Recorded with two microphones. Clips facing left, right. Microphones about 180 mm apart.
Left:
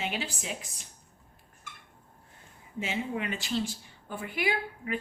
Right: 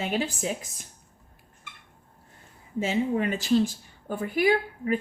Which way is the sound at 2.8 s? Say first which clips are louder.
Right 7 dB; 40° right (ahead or behind).